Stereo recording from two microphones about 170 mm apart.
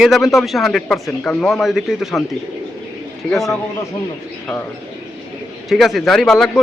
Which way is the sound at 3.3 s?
Centre (ahead or behind).